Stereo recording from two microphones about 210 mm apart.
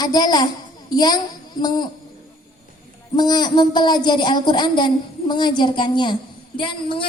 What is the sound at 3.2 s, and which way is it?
A woman's voice, 20° left (ahead or behind).